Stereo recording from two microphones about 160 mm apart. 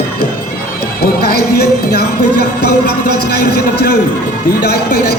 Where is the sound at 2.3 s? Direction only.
50° right (ahead or behind).